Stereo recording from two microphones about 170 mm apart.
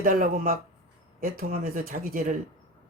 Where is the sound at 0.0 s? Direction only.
55° right (ahead or behind).